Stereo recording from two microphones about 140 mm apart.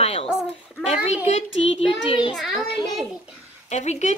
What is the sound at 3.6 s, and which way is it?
Speech, 55° left (ahead or behind).